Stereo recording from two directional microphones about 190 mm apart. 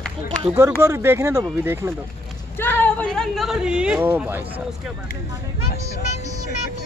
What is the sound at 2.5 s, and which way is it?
Speech, 10° left (ahead or behind).